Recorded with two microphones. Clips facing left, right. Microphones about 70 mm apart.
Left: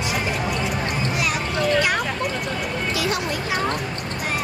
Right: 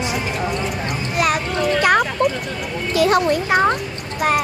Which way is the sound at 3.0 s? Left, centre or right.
Right.